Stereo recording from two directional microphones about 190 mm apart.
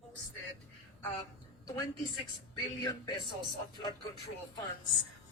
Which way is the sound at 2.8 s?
25° left (ahead or behind).